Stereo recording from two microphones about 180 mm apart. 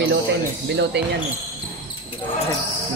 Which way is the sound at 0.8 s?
70° right (ahead or behind).